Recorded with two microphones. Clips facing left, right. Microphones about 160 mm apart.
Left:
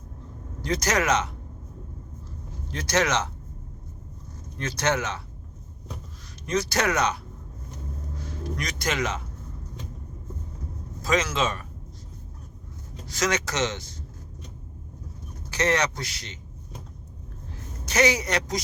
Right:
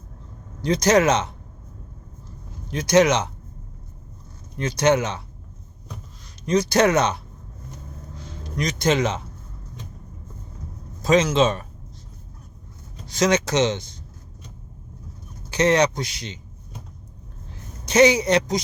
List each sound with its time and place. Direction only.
0.6 s speech: 20° right (ahead or behind)
2.6 s speech: 15° right (ahead or behind)
4.5 s speech: 15° right (ahead or behind)
6.4 s speech: 20° right (ahead or behind)
8.2 s speech: 20° right (ahead or behind)
11.0 s speech: 20° right (ahead or behind)
13.1 s speech: 20° right (ahead or behind)
15.4 s speech: 20° right (ahead or behind)
17.8 s speech: 20° right (ahead or behind)